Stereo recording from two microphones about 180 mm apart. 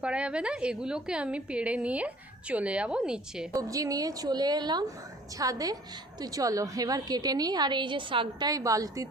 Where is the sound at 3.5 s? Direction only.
20° right (ahead or behind).